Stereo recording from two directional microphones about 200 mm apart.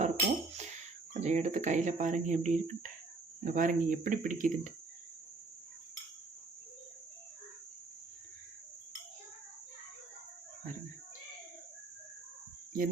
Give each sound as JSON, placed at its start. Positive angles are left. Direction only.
{"t": 0.0, "sound": "tambourine", "side_deg": -35}
{"t": 1.1, "sound": "speech", "side_deg": -35}